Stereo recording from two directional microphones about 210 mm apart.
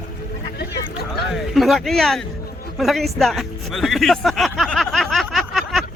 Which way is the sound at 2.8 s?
Centre (ahead or behind).